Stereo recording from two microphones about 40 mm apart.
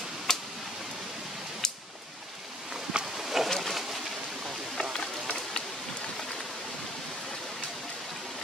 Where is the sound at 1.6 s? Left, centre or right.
Centre.